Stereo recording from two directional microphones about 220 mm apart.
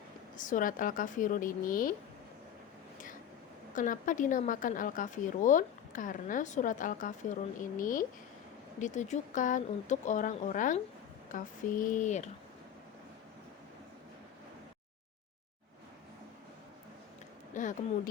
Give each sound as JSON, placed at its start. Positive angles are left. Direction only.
{"t": 0.3, "sound": "a woman's voice", "side_deg": 35}
{"t": 3.8, "sound": "a woman's voice", "side_deg": 35}
{"t": 17.5, "sound": "speech", "side_deg": 35}